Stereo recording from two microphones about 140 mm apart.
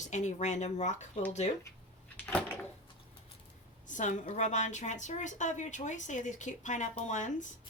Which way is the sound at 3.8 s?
65° left (ahead or behind).